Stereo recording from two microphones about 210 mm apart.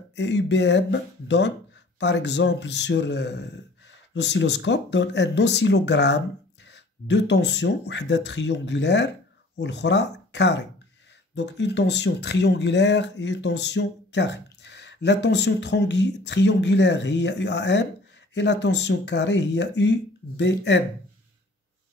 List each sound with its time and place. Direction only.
0.1 s speech: 55° left (ahead or behind)